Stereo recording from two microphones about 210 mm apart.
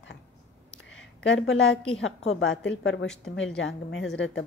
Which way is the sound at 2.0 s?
75° left (ahead or behind).